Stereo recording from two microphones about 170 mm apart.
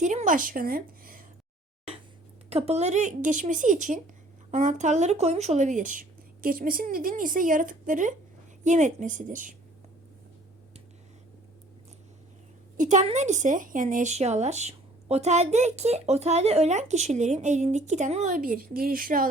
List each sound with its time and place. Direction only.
0.0 s speech: 45° right (ahead or behind)
2.5 s speech: 40° right (ahead or behind)
12.7 s speech: 45° right (ahead or behind)